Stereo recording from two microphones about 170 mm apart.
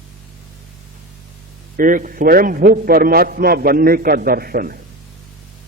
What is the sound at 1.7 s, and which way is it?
A man's voice, 55° right (ahead or behind).